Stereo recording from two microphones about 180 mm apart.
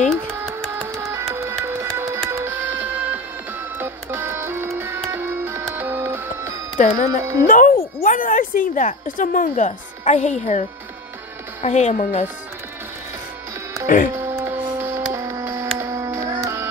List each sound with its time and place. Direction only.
0.3 s a sound: 15° right (ahead or behind)
0.7 s music: 15° right (ahead or behind)
7.1 s speech: 20° right (ahead or behind)
7.4 s a child's voice: 50° left (ahead or behind)
11.6 s a woman's voice: 40° left (ahead or behind)
13.8 s speech: 45° left (ahead or behind)
14.1 s a sound: 15° right (ahead or behind)
15.1 s music: 15° right (ahead or behind)